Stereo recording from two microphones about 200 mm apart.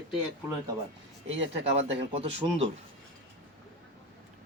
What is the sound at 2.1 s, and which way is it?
Speech, 30° right (ahead or behind).